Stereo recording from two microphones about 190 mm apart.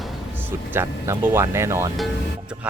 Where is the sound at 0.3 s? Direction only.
10° right (ahead or behind).